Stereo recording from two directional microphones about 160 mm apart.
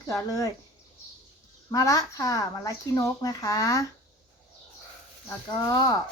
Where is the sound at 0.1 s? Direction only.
20° left (ahead or behind).